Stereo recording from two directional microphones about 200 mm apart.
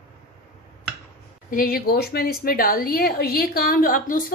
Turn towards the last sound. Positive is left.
turn(degrees=45)  # may be behind; listen again after turning